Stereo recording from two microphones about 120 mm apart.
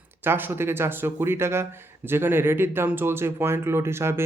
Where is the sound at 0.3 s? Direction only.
20° right (ahead or behind).